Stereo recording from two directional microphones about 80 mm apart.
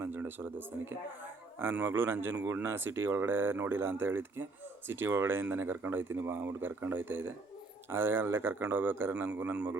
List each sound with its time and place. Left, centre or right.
0.0 s speech: right
9.1 s a man's voice: centre